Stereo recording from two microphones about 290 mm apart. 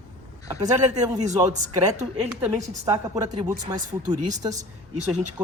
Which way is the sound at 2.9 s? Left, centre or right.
Centre.